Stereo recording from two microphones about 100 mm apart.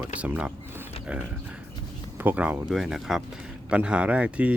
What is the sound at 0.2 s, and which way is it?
Speech, 10° right (ahead or behind).